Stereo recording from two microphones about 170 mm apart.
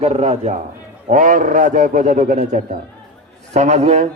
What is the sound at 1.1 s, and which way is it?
A man's voice, 50° right (ahead or behind).